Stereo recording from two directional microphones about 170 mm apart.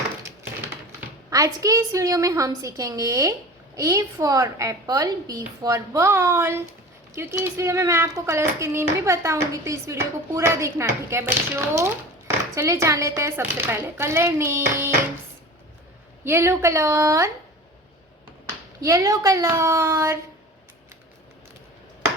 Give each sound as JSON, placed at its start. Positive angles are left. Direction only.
{"t": 0.2, "sound": "a sound", "side_deg": -15}
{"t": 1.3, "sound": "a woman's voice", "side_deg": -20}
{"t": 16.2, "sound": "a child's voice", "side_deg": -15}
{"t": 18.8, "sound": "a child's voice", "side_deg": -20}